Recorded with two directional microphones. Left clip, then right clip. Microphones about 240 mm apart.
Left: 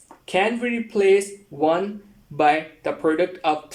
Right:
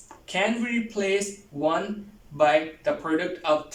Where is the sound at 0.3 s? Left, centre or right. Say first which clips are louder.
Left 4 dB; left.